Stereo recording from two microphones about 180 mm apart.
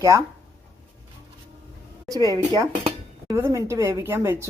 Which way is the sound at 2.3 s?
20° right (ahead or behind).